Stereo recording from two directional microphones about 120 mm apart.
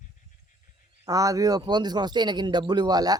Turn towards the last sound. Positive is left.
turn(degrees=-35)  # may be behind; listen again after turning